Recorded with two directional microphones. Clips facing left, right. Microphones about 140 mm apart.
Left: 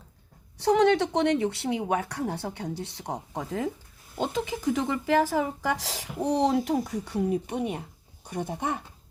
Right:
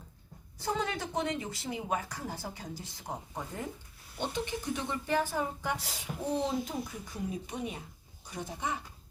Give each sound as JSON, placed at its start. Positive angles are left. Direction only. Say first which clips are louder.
{"t": 0.6, "sound": "speech", "louder": "left 13 dB", "side_deg": 75}